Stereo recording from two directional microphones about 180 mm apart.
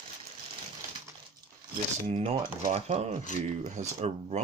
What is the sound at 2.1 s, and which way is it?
Speech, 35° right (ahead or behind).